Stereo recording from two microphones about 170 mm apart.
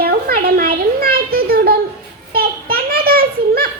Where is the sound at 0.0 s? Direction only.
65° right (ahead or behind).